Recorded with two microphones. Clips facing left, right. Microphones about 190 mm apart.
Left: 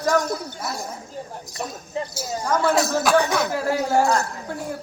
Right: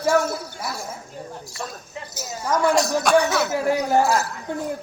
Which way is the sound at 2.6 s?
Centre (ahead or behind).